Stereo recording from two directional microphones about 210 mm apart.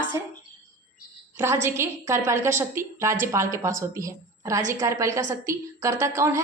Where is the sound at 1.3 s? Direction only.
10° right (ahead or behind).